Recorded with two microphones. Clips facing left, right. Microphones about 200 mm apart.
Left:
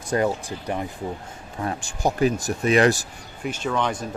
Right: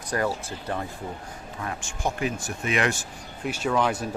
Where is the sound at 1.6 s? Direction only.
35° left (ahead or behind).